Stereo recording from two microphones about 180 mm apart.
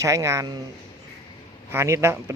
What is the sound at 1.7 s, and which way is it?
Speech, 15° right (ahead or behind).